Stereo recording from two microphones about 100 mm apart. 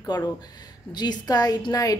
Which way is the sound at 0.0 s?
35° left (ahead or behind).